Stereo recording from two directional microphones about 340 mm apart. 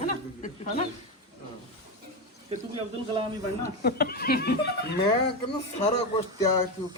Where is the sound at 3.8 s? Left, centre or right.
Left.